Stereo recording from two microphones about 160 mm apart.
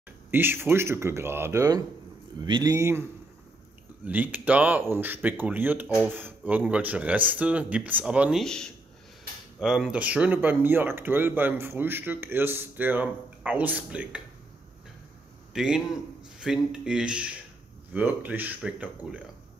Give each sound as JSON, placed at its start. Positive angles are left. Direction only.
{"t": 0.3, "sound": "speech", "side_deg": -15}
{"t": 15.5, "sound": "a man's voice", "side_deg": -5}